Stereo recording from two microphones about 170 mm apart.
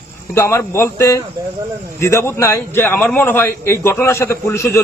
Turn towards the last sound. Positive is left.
turn(degrees=15)  # may be behind; listen again after turning